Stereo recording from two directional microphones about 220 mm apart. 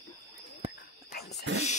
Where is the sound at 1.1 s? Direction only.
50° left (ahead or behind).